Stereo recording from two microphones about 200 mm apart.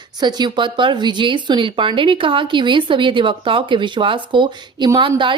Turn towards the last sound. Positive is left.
turn(degrees=-25)  # may be behind; listen again after turning